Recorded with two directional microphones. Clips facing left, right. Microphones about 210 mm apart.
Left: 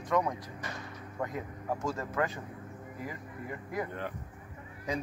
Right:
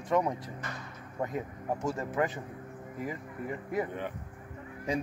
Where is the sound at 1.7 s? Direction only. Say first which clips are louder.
Right 2 dB; 15° right (ahead or behind).